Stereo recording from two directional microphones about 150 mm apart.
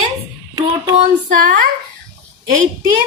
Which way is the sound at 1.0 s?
65° right (ahead or behind).